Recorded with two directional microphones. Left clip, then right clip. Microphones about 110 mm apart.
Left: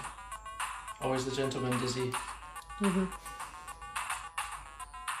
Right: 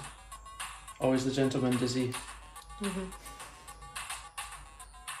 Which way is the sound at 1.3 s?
45° right (ahead or behind).